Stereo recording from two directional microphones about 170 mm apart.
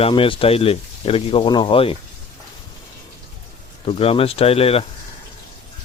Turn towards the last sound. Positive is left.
turn(degrees=35)  # may be behind; listen again after turning